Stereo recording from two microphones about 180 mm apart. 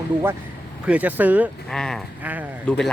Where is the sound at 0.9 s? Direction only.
10° right (ahead or behind).